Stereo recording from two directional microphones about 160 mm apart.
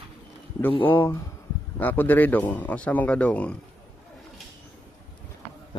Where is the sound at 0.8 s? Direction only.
15° left (ahead or behind).